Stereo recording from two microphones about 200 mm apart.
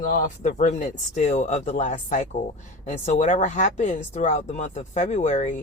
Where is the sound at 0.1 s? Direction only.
40° left (ahead or behind).